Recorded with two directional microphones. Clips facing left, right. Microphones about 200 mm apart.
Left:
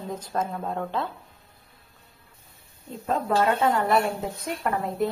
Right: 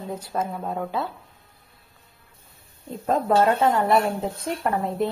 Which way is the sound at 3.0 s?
35° right (ahead or behind).